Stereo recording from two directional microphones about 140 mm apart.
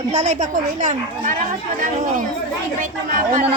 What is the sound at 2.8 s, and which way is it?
Speech, 70° right (ahead or behind).